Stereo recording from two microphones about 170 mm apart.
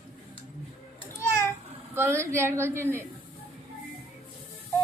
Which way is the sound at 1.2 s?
15° left (ahead or behind).